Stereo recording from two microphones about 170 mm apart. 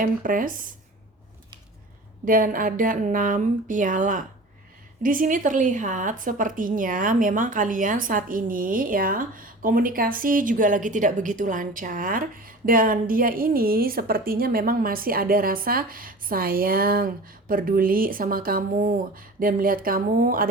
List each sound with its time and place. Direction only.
0.0 s speech: 55° right (ahead or behind)
2.2 s a woman's voice: 55° right (ahead or behind)